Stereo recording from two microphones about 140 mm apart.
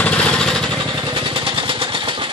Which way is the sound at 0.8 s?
30° right (ahead or behind).